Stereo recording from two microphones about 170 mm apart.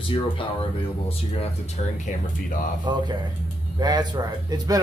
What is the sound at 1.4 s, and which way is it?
Speech, 40° left (ahead or behind).